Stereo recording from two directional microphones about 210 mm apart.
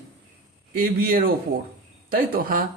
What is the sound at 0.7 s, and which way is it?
A man's voice, 45° right (ahead or behind).